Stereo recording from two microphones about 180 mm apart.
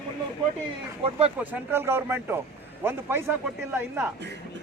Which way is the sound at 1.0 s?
35° right (ahead or behind).